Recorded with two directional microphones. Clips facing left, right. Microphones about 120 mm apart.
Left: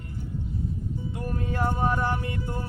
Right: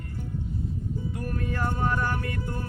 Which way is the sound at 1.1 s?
20° left (ahead or behind).